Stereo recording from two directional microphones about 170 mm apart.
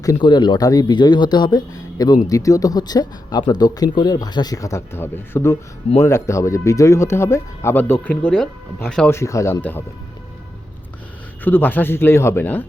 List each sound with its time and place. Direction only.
0.0 s speech: 25° left (ahead or behind); by 9.0 s 5° left (ahead or behind)
9.0 s speech: 15° left (ahead or behind)
11.4 s speech: 10° left (ahead or behind)